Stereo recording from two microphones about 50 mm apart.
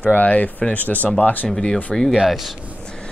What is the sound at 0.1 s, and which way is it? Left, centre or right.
Speech, left.